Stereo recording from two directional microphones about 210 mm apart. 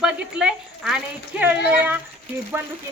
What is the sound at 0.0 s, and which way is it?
Speech, 5° right (ahead or behind).